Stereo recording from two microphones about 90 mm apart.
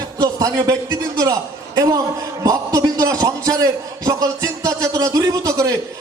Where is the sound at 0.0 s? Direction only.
45° right (ahead or behind).